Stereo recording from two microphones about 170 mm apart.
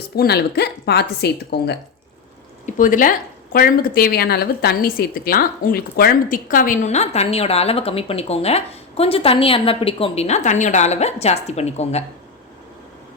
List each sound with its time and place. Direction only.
0.2 s speech: 75° left (ahead or behind)
2.6 s speech: 50° left (ahead or behind)